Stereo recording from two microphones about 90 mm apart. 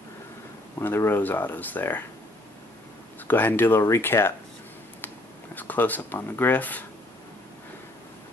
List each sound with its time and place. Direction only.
0.7 s speech: 30° left (ahead or behind)
3.3 s speech: 20° left (ahead or behind)